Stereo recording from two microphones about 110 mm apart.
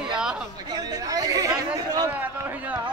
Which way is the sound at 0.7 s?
35° right (ahead or behind).